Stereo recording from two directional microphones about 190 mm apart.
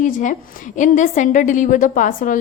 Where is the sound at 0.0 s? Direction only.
40° left (ahead or behind).